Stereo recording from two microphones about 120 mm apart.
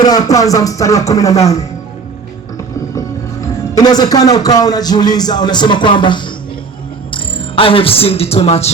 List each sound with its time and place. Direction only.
0.0 s speech: 35° left (ahead or behind)
3.4 s a man's voice: 30° left (ahead or behind); by 8.7 s 60° left (ahead or behind)